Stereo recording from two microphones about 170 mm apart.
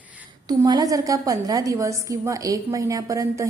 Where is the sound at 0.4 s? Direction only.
20° right (ahead or behind).